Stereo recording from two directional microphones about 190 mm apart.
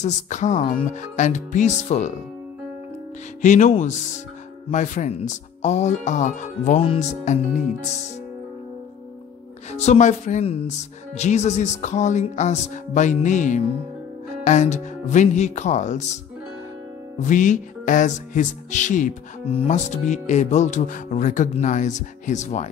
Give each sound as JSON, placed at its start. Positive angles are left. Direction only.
{"t": 0.0, "sound": "music", "side_deg": 40}
{"t": 3.4, "sound": "music", "side_deg": 40}
{"t": 9.7, "sound": "music", "side_deg": 35}
{"t": 17.2, "sound": "music", "side_deg": 40}